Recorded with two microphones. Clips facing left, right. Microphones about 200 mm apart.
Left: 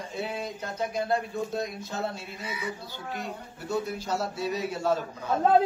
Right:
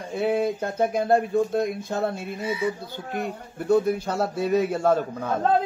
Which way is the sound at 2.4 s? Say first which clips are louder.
Right 10 dB; 25° right (ahead or behind).